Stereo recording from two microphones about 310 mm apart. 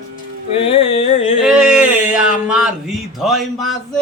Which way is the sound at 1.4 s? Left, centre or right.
Centre.